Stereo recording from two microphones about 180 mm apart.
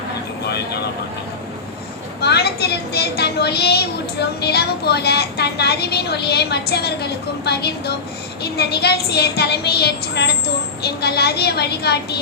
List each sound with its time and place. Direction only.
2.2 s a woman's voice: 65° left (ahead or behind)